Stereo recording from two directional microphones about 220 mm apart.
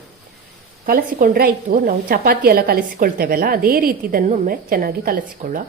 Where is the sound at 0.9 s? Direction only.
40° right (ahead or behind).